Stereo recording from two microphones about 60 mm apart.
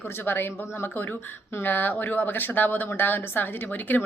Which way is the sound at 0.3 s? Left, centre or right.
Left.